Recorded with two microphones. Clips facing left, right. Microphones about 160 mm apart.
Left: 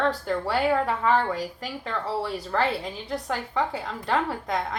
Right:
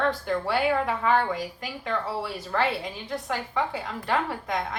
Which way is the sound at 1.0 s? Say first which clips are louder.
Even; 5° right (ahead or behind).